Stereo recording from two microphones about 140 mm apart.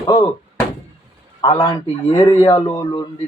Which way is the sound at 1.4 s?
35° left (ahead or behind).